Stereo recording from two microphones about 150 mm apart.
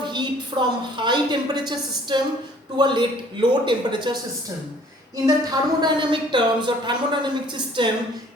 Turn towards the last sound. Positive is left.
turn(degrees=-30)  # may be behind; listen again after turning